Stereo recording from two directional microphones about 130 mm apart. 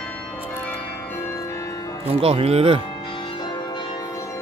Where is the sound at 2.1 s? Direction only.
50° right (ahead or behind).